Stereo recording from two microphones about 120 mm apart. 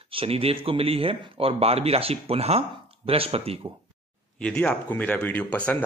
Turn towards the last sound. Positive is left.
turn(degrees=10)  # may be behind; listen again after turning